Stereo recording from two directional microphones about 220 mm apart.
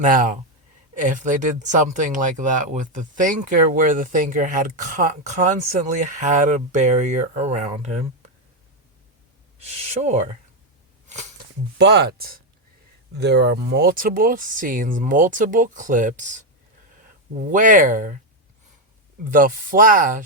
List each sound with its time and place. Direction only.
0.0 s speech: 35° right (ahead or behind)
9.6 s speech: 30° right (ahead or behind)
11.8 s speech: 50° right (ahead or behind)
17.5 s speech: 35° right (ahead or behind)
19.3 s speech: 40° right (ahead or behind)